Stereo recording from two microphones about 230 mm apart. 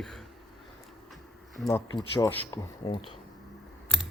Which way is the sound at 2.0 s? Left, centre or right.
Centre.